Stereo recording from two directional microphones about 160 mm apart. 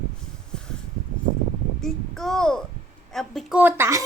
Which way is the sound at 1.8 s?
Centre (ahead or behind).